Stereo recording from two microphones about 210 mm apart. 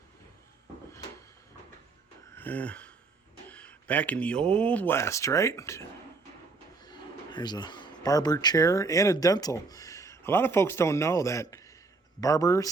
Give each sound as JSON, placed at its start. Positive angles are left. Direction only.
{"t": 2.3, "sound": "a sound", "side_deg": 10}
{"t": 3.5, "sound": "speech", "side_deg": 5}
{"t": 6.8, "sound": "speech", "side_deg": 20}